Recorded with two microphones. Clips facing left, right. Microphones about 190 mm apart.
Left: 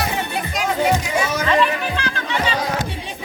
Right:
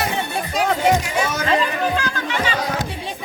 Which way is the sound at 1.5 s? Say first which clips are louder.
Even; 40° right (ahead or behind).